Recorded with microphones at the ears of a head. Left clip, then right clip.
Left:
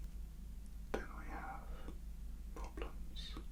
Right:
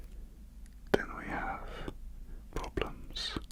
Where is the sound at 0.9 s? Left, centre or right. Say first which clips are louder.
Right 13 dB; right.